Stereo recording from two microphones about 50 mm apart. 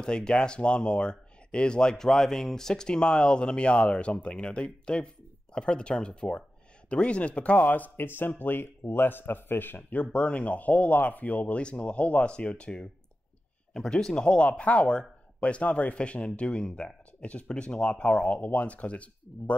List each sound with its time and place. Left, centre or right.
0.0 s speech: centre; by 7.9 s left
8.0 s speech: left
10.1 s speech: left